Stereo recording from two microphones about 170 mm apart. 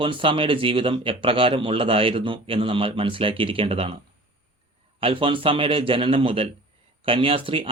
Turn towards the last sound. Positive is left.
turn(degrees=-30)  # may be behind; listen again after turning